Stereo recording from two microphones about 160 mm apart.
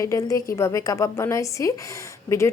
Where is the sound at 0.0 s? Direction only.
20° left (ahead or behind).